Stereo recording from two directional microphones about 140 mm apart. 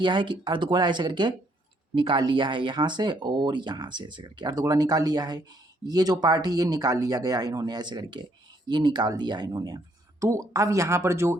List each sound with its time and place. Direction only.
0.0 s speech: 35° right (ahead or behind)